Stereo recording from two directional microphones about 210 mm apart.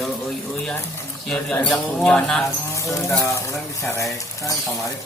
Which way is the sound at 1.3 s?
5° left (ahead or behind).